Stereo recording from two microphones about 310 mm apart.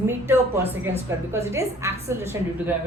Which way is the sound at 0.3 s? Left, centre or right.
Centre.